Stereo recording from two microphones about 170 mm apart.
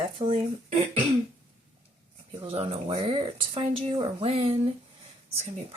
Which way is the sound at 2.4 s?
35° right (ahead or behind).